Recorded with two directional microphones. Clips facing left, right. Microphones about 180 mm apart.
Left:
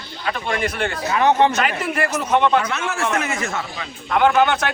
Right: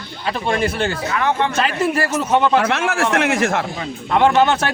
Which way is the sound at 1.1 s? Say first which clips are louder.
Left 7 dB; 20° left (ahead or behind).